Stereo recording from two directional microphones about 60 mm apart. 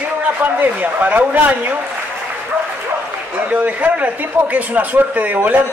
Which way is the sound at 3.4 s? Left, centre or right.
Right.